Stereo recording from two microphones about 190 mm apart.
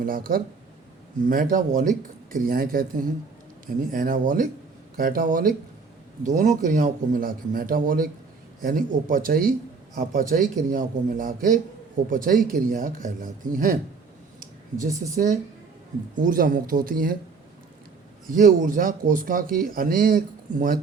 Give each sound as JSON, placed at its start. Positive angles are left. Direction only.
{"t": 0.0, "sound": "speech", "side_deg": -50}
{"t": 15.1, "sound": "speech", "side_deg": -40}
{"t": 18.3, "sound": "speech", "side_deg": -45}